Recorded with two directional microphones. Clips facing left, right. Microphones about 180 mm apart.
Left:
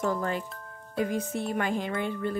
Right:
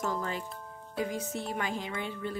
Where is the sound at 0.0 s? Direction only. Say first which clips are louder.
Left 5 dB; 55° left (ahead or behind).